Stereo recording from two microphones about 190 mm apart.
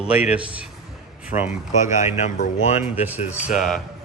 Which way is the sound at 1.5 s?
40° left (ahead or behind).